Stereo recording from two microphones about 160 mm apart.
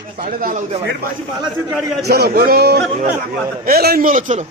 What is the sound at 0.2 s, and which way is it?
Speech, 55° right (ahead or behind).